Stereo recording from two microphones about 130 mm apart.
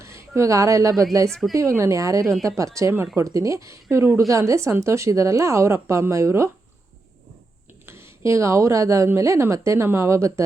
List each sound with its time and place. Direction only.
0.0 s speech: 20° right (ahead or behind)
1.3 s a woman's voice: centre (ahead or behind)
1.5 s speech: 25° right (ahead or behind)
7.9 s speech: 20° right (ahead or behind)